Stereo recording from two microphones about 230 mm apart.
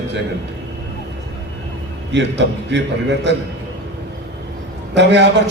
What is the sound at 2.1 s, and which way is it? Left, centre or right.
Speech, right.